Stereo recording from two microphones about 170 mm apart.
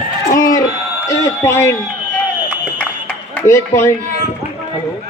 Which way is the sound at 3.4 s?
15° left (ahead or behind).